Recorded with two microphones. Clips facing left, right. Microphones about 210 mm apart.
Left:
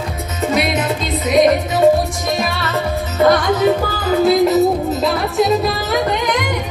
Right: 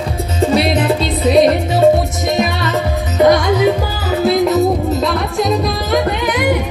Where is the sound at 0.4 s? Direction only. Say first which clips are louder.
Right 4 dB; 30° right (ahead or behind).